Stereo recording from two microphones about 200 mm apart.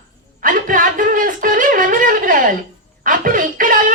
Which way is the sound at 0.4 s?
45° right (ahead or behind).